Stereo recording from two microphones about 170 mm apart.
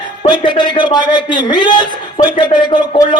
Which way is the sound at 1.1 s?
25° left (ahead or behind).